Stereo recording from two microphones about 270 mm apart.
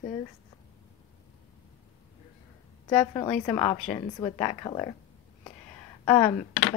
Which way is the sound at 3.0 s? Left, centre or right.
Centre.